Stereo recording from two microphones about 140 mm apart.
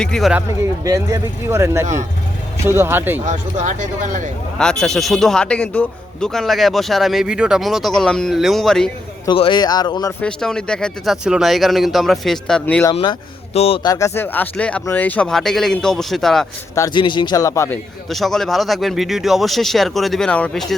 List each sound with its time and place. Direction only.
0.0 s speech: 5° left (ahead or behind)
0.3 s speech: 20° right (ahead or behind)
3.2 s speech: 60° right (ahead or behind)
4.5 s speech: 5° left (ahead or behind)
9.3 s speech: 35° left (ahead or behind)
10.1 s speech: 10° left (ahead or behind)
12.9 s speech: 35° left (ahead or behind)
13.8 s speech: 25° left (ahead or behind); by 16.5 s centre (ahead or behind)
16.9 s speech: 35° left (ahead or behind)
18.1 s speech: centre (ahead or behind)